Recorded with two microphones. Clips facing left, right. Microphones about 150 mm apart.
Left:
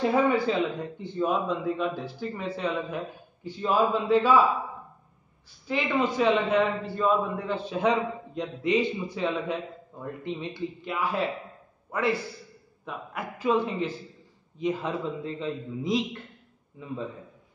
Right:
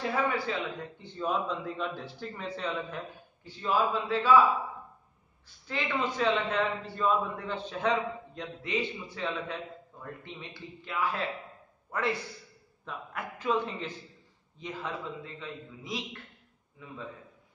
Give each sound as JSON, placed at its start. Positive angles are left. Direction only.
{"t": 0.0, "sound": "a man's voice", "side_deg": 20}
{"t": 1.0, "sound": "a man's voice", "side_deg": 10}
{"t": 3.4, "sound": "a man's voice", "side_deg": 20}
{"t": 5.7, "sound": "a man's voice", "side_deg": 10}
{"t": 11.9, "sound": "a man's voice", "side_deg": 5}